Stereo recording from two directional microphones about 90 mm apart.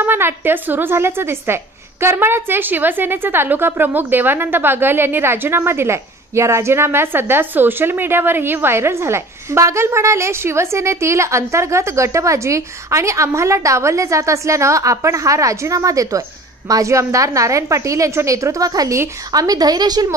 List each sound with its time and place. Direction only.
0.0 s a woman's voice: 25° right (ahead or behind); by 20.2 s 50° right (ahead or behind)